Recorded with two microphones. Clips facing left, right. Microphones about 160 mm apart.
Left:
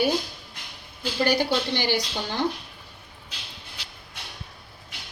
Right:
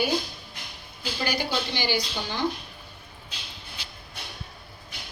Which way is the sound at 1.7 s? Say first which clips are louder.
Left 2 dB; 60° left (ahead or behind).